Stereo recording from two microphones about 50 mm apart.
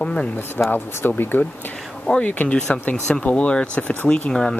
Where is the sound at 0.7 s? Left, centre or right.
Left.